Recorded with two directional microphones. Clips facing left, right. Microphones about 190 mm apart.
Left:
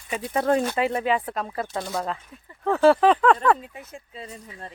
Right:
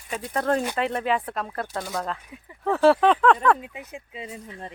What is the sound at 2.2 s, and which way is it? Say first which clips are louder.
Speech: right 3 dB; 10° right (ahead or behind).